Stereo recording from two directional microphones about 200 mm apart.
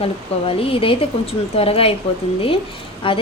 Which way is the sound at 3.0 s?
25° left (ahead or behind).